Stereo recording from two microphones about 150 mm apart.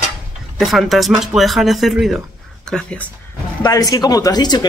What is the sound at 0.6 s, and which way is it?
Speech, centre (ahead or behind).